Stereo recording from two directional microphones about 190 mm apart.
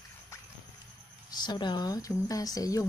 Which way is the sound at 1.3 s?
20° left (ahead or behind).